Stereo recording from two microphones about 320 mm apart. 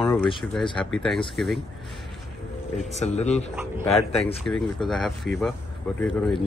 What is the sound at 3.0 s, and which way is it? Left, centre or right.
Speech, left.